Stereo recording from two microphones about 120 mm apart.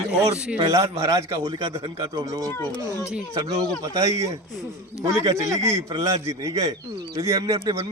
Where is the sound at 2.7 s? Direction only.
35° left (ahead or behind).